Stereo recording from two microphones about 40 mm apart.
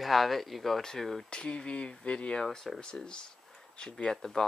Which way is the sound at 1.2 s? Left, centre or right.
Left.